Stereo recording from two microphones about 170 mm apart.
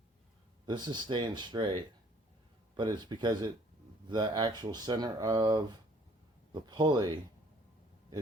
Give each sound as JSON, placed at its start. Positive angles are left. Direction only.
{"t": 0.6, "sound": "speech", "side_deg": -25}